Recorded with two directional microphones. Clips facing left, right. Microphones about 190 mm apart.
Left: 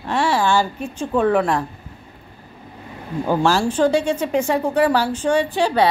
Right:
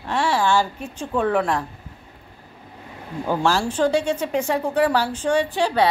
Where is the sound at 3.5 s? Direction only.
5° left (ahead or behind).